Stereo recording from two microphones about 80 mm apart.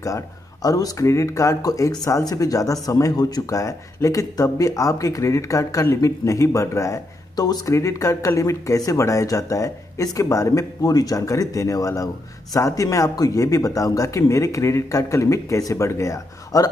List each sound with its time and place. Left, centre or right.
0.0 s speech: left
3.5 s speech: left
7.4 s speech: left
7.7 s speech: left